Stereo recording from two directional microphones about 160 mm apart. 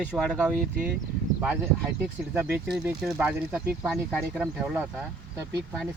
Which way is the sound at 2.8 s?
5° right (ahead or behind).